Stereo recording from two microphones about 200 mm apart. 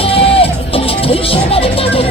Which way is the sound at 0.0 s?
30° left (ahead or behind).